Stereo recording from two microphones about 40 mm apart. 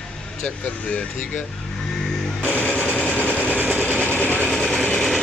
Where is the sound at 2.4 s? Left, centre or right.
Left.